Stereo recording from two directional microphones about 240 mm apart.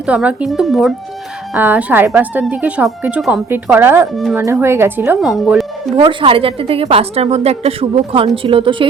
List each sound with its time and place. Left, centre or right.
0.0 s speech: centre
6.0 s a woman's voice: right